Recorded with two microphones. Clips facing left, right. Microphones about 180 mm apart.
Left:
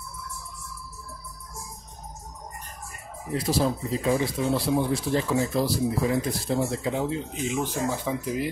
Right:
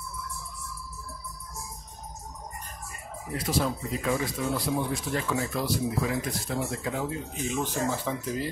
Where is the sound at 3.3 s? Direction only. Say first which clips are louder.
Left 4 dB; 30° left (ahead or behind).